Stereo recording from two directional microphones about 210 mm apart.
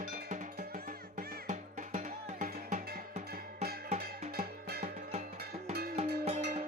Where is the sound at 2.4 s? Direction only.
35° right (ahead or behind).